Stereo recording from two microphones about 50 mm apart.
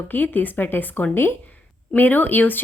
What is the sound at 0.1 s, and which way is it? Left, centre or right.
Speech, left.